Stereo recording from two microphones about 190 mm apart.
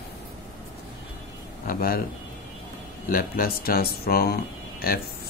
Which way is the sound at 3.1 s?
50° left (ahead or behind).